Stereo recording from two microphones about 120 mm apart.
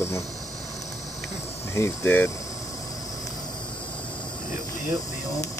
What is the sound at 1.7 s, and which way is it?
Speech, 20° left (ahead or behind).